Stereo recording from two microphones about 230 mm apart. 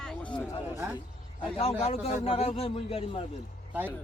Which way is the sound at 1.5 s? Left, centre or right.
Left.